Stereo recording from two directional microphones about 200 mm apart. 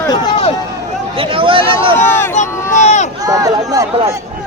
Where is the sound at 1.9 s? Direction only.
10° left (ahead or behind).